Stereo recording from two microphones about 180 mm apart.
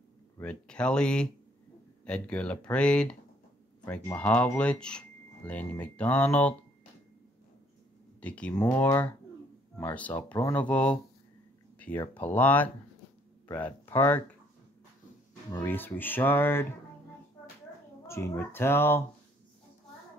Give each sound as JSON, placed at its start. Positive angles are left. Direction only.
{"t": 0.4, "sound": "speech", "side_deg": 5}
{"t": 8.2, "sound": "speech", "side_deg": 5}
{"t": 12.1, "sound": "speech", "side_deg": 10}
{"t": 15.6, "sound": "speech", "side_deg": 10}
{"t": 18.0, "sound": "speech", "side_deg": 15}